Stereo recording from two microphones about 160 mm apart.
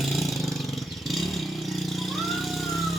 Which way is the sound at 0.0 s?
Centre (ahead or behind).